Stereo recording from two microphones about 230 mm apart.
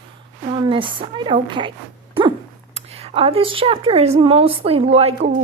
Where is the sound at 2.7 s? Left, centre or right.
Right.